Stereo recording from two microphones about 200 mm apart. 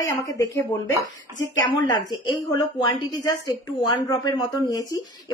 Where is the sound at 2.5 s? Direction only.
20° left (ahead or behind).